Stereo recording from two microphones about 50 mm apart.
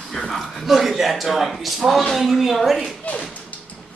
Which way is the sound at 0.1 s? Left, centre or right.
Centre.